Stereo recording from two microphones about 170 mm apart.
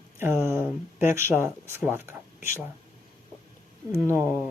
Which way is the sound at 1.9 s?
15° right (ahead or behind).